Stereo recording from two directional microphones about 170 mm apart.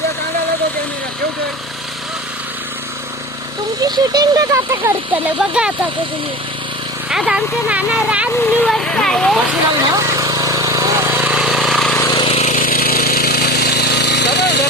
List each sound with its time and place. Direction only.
3.8 s speech: 25° right (ahead or behind); by 5.7 s 5° right (ahead or behind)
7.1 s speech: 5° right (ahead or behind)
8.4 s speech: 5° left (ahead or behind)
9.9 s vehicle: 20° right (ahead or behind); by 11.9 s centre (ahead or behind)
11.9 s a sound: 20° left (ahead or behind)
12.2 s a sound: 35° left (ahead or behind)
12.5 s jackhammer: 55° left (ahead or behind); by 14.7 s 85° left